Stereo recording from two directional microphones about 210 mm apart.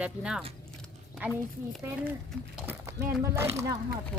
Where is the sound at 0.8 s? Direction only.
Centre (ahead or behind).